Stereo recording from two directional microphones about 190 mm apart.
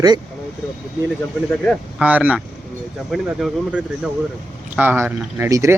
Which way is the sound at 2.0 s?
10° right (ahead or behind).